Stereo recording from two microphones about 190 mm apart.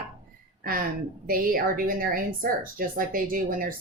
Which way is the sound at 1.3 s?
50° right (ahead or behind).